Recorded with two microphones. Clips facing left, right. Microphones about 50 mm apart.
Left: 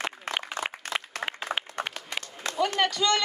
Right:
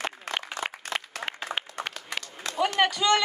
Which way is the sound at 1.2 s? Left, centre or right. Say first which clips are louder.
Left 2 dB; left.